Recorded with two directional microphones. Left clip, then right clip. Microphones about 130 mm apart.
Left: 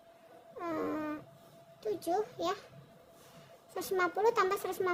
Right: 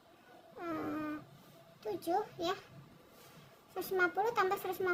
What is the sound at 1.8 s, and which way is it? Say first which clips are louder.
Speech: left 2 dB; 25° left (ahead or behind).